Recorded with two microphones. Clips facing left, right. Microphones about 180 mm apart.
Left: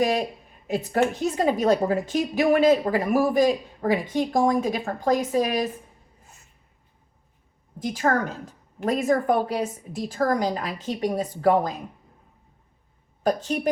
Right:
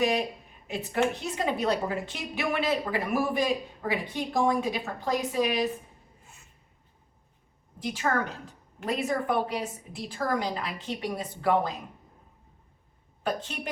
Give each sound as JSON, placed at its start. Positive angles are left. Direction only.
{"t": 0.0, "sound": "a woman's voice", "side_deg": 40}
{"t": 7.8, "sound": "a woman's voice", "side_deg": 40}
{"t": 13.2, "sound": "a woman's voice", "side_deg": 40}